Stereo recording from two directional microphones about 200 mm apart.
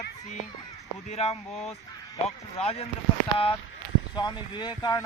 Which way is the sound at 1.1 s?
30° left (ahead or behind).